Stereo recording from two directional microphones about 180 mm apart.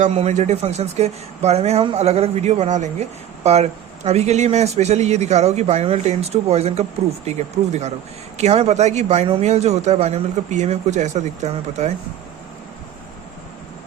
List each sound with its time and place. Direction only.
0.0 s speech: 35° right (ahead or behind)